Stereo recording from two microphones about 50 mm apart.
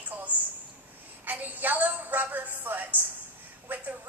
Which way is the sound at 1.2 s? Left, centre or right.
Right.